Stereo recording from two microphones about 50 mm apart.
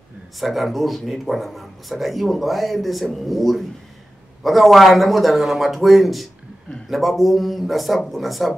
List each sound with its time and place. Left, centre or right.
0.4 s speech: centre